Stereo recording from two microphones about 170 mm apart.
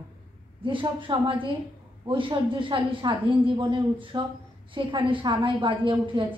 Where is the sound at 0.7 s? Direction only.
30° right (ahead or behind).